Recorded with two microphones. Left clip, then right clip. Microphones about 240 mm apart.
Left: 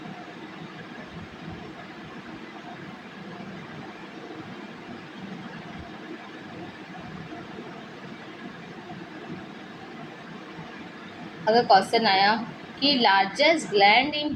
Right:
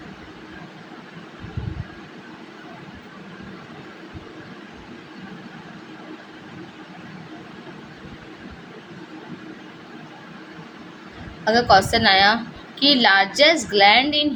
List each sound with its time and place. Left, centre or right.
11.4 s a woman's voice: right